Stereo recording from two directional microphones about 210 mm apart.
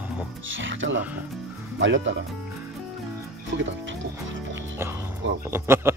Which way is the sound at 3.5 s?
60° right (ahead or behind).